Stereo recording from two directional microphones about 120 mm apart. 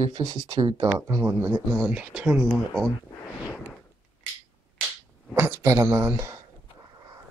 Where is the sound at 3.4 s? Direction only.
10° left (ahead or behind).